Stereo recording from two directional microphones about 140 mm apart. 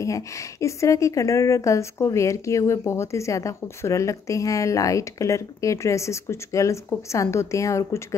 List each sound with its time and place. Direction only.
0.0 s speech: 20° left (ahead or behind)